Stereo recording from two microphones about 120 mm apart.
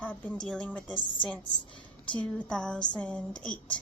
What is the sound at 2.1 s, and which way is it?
A woman's voice, 10° left (ahead or behind).